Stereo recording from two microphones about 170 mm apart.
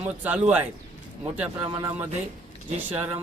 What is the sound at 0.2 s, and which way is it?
Speech, 10° right (ahead or behind).